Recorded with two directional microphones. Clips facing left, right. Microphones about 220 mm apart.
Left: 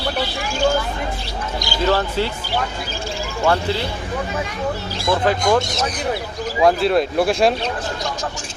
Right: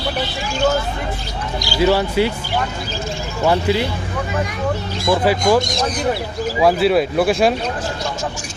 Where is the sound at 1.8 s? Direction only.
10° right (ahead or behind).